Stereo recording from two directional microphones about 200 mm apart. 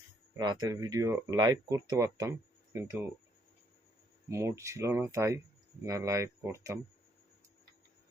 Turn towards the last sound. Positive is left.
turn(degrees=-15)  # may be behind; listen again after turning